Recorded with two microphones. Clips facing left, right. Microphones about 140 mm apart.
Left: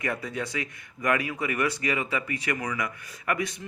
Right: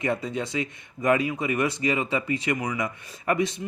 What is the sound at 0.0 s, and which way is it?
Speech, 25° right (ahead or behind).